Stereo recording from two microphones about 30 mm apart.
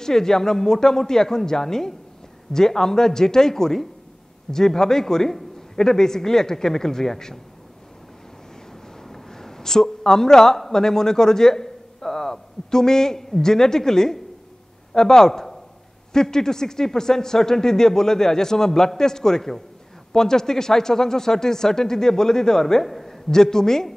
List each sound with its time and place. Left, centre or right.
0.0 s speech: centre
9.1 s a man's voice: centre
23.3 s speech: centre